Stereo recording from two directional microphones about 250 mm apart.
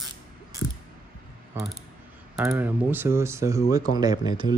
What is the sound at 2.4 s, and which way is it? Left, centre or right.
Speech, centre.